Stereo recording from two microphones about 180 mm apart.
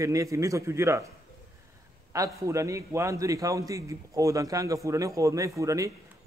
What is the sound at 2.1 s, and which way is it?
A man's voice, 15° right (ahead or behind).